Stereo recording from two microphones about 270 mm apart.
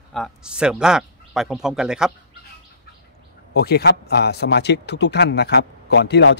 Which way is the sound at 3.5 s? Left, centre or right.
Left.